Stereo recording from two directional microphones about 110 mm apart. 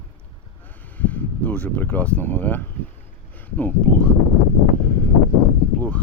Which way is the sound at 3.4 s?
15° left (ahead or behind).